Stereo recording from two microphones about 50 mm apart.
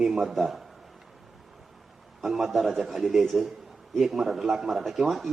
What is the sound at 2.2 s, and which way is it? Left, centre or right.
A man's voice, centre.